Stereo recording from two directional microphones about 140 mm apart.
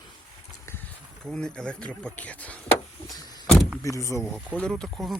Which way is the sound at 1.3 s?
5° left (ahead or behind).